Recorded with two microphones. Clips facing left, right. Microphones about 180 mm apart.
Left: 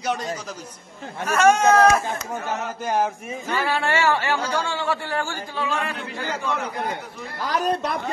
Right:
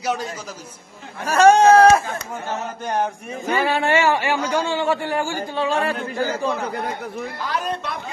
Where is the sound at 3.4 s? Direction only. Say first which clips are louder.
Right 4 dB; 20° right (ahead or behind).